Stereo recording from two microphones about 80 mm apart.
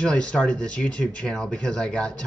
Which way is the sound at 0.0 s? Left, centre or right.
Centre.